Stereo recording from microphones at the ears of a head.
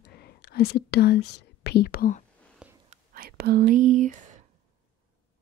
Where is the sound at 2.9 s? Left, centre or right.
Right.